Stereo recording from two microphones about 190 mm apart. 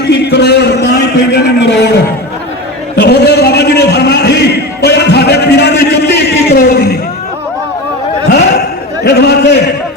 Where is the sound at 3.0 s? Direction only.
60° left (ahead or behind).